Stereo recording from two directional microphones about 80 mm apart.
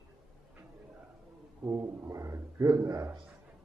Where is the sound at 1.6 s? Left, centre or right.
Right.